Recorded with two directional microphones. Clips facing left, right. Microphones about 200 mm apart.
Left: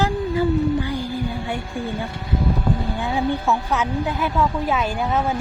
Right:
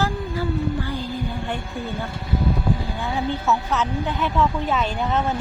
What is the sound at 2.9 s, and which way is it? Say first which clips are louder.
A woman's voice: left 3 dB; 15° left (ahead or behind).